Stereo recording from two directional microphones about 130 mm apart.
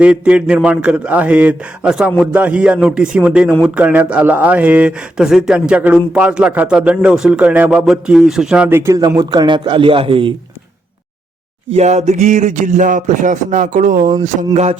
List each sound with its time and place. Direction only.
0.0 s a man's voice: 10° right (ahead or behind)
8.7 s a man's voice: 25° right (ahead or behind); by 10.3 s 45° right (ahead or behind)
11.7 s speech: 60° right (ahead or behind); by 14.1 s 90° right
14.5 s a sound: 60° right (ahead or behind)